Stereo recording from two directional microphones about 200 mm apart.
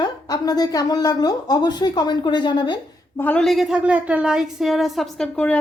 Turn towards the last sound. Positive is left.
turn(degrees=5)  # may be behind; listen again after turning